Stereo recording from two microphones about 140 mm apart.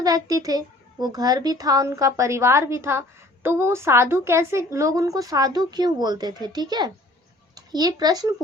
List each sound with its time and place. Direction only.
0.0 s a woman's voice: 25° right (ahead or behind)